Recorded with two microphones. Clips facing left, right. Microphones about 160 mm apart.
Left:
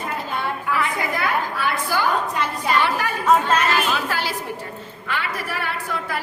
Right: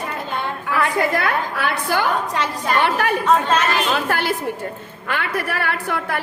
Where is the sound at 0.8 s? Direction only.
65° right (ahead or behind).